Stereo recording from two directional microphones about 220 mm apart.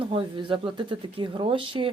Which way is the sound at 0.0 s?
20° right (ahead or behind).